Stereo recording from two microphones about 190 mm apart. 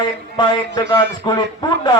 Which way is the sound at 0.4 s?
25° left (ahead or behind).